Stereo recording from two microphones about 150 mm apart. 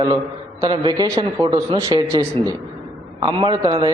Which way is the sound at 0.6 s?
30° right (ahead or behind).